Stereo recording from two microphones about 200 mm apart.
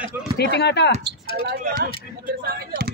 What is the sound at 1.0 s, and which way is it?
Speech, 55° right (ahead or behind).